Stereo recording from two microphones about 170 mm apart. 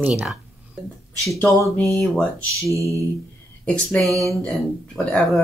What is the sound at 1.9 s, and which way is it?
Speech, centre (ahead or behind).